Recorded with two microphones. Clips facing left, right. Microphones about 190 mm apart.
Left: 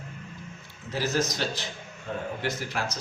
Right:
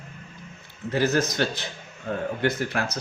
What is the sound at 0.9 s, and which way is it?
A man's voice, 60° right (ahead or behind).